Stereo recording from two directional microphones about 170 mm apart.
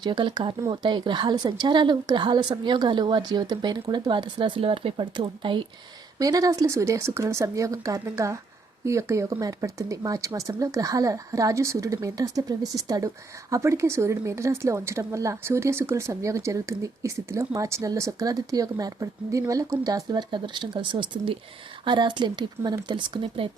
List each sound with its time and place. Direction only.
0.0 s a woman's voice: 25° right (ahead or behind)